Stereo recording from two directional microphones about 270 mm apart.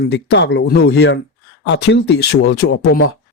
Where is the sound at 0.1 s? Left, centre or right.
Left.